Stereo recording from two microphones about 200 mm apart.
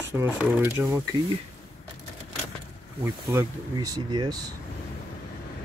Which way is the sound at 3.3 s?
20° right (ahead or behind).